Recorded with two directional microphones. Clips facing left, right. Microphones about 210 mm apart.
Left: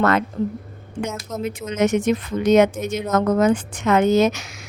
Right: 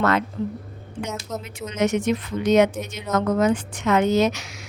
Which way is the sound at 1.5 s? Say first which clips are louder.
Left 2 dB; 50° left (ahead or behind).